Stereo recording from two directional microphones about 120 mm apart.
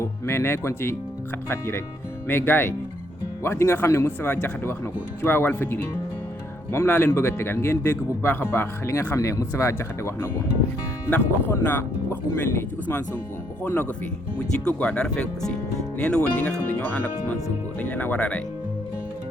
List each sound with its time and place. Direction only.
0.0 s speech: 20° left (ahead or behind)